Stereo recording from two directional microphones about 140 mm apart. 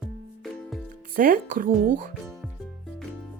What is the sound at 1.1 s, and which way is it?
Speech, 75° right (ahead or behind).